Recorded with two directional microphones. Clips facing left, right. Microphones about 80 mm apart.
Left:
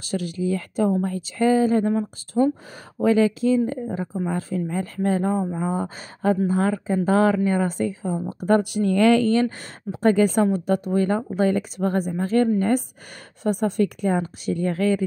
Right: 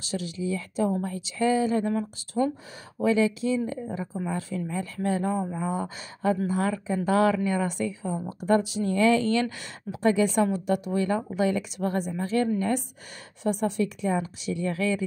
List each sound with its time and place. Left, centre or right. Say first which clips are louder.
0.0 s speech: left 5 dB; left
2.4 s speech: left 6 dB; left
3.0 s speech: left 5 dB; left
9.3 s speech: left 5 dB; left